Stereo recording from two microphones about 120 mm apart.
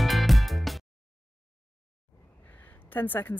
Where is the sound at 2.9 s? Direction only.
15° left (ahead or behind).